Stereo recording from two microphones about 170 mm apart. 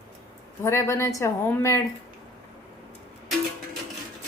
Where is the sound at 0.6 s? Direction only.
15° left (ahead or behind).